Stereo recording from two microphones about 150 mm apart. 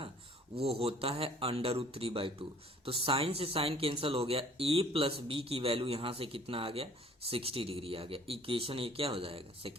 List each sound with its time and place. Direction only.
0.6 s speech: 40° right (ahead or behind)